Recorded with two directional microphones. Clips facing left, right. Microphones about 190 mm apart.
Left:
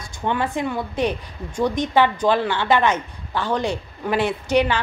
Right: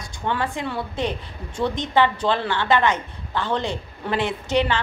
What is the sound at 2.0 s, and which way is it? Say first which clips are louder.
Speech: left 2 dB; 15° left (ahead or behind).